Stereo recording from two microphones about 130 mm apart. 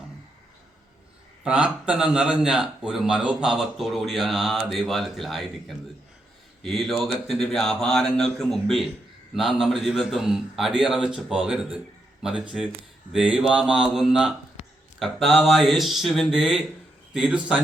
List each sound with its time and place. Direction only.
1.5 s speech: 10° right (ahead or behind)